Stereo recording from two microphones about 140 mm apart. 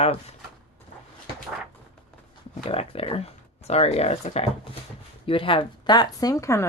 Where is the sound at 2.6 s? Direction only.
45° left (ahead or behind); by 6.7 s 20° left (ahead or behind).